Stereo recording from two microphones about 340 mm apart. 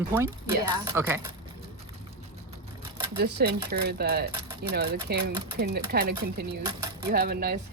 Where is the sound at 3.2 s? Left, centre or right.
Right.